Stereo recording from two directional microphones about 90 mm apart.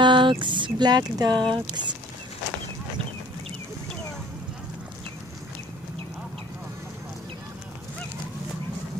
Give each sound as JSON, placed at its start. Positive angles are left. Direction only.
{"t": 0.0, "sound": "speech", "side_deg": -65}